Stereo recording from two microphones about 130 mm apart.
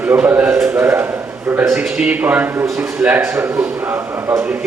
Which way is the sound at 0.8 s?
15° right (ahead or behind).